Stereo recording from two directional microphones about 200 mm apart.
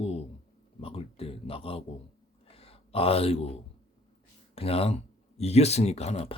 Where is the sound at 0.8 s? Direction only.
30° left (ahead or behind).